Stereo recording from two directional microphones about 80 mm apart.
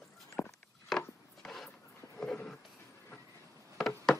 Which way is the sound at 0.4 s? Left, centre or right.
Centre.